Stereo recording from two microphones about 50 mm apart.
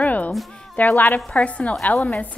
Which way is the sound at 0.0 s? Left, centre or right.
Left.